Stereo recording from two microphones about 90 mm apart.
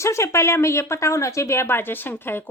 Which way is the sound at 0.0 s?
35° left (ahead or behind).